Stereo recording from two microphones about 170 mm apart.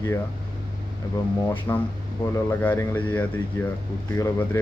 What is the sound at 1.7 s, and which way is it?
Speech, 15° left (ahead or behind).